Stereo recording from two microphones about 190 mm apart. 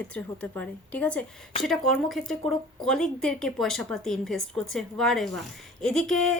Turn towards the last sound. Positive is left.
turn(degrees=0)  # may be behind; listen again after turning